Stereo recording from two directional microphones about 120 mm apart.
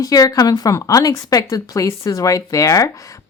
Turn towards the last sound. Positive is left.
turn(degrees=30)  # may be behind; listen again after turning